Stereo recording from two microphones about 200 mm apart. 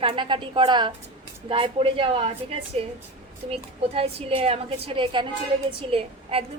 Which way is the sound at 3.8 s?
30° right (ahead or behind).